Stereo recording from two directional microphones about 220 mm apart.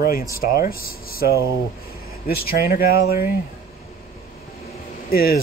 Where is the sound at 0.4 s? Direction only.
40° left (ahead or behind).